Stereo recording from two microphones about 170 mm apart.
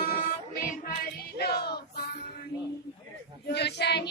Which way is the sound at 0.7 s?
55° left (ahead or behind).